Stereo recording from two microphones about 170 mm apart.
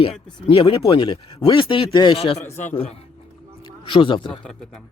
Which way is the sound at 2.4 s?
15° left (ahead or behind).